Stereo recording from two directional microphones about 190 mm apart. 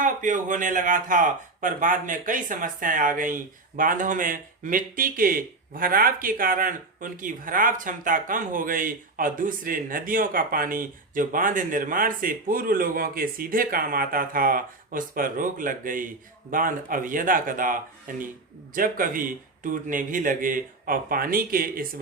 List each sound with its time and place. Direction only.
0.0 s speech: 40° right (ahead or behind)